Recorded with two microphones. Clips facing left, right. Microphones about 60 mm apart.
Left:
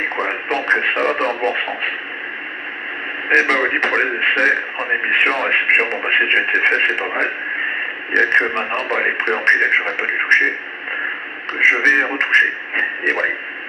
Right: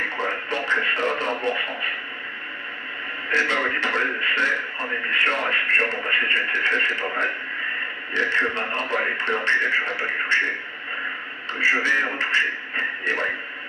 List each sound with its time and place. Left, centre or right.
0.2 s radio: left
3.3 s a man's voice: left
11.6 s radio: left